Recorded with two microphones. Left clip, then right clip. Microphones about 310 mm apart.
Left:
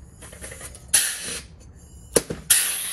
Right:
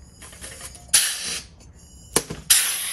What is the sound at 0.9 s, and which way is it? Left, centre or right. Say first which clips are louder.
Music: right 3 dB; centre.